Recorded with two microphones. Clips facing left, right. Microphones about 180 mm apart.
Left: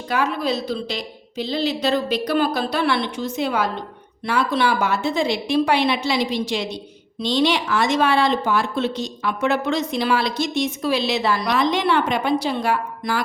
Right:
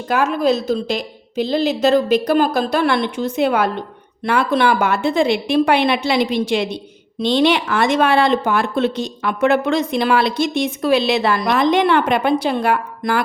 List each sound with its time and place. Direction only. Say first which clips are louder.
0.1 s a woman's voice: right 5 dB; 50° right (ahead or behind)